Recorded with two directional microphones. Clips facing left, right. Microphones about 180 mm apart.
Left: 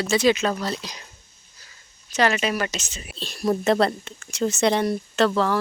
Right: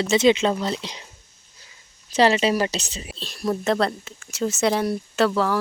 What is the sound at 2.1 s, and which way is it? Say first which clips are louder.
Speech: right 4 dB; 30° right (ahead or behind).